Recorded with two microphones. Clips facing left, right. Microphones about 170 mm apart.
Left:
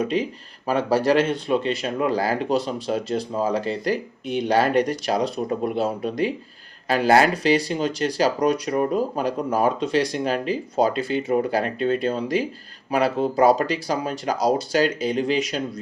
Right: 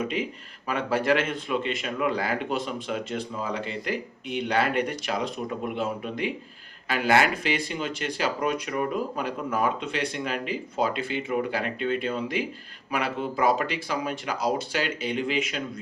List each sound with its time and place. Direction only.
0.0 s speech: 35° left (ahead or behind)